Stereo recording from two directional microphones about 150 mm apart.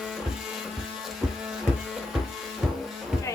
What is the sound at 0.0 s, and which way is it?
Printer, 5° right (ahead or behind).